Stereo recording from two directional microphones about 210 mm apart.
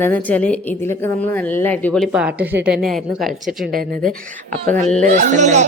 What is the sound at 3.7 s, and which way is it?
Speech, 40° right (ahead or behind).